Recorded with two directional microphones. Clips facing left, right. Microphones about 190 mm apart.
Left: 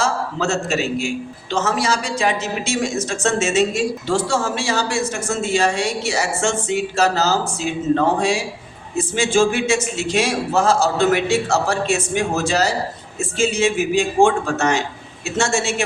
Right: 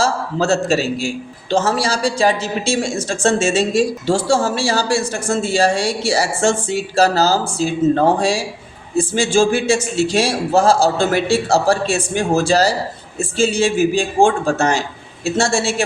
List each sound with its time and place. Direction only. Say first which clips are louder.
0.0 s a man's voice: right 3 dB; 35° right (ahead or behind)